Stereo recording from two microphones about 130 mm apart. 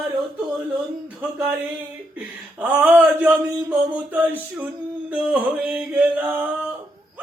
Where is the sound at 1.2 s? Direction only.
10° right (ahead or behind).